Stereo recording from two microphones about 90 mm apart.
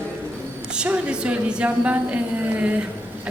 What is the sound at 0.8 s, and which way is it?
A woman's voice, 10° right (ahead or behind).